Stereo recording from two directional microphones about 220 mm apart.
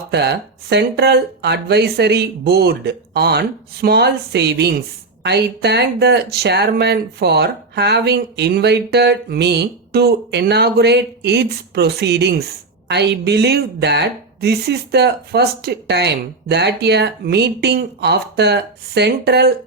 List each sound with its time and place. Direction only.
0.1 s speech: 50° right (ahead or behind)